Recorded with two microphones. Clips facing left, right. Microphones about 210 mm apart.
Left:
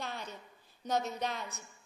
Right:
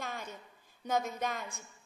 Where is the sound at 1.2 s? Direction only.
50° right (ahead or behind).